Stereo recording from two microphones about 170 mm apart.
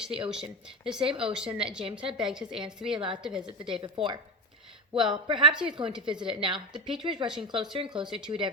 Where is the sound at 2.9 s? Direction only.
30° right (ahead or behind).